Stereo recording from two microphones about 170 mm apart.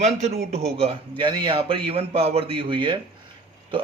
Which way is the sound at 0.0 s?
40° right (ahead or behind).